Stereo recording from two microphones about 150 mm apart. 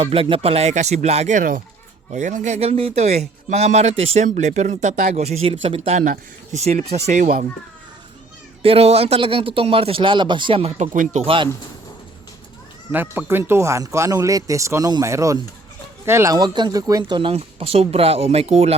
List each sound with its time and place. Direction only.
0.0 s speech: 40° right (ahead or behind)
8.6 s speech: 40° right (ahead or behind)
10.9 s speech: 55° right (ahead or behind)
12.9 s speech: 15° right (ahead or behind); by 18.8 s 45° right (ahead or behind)